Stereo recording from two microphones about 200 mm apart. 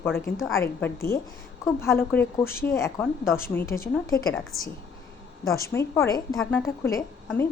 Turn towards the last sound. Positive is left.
turn(degrees=15)  # may be behind; listen again after turning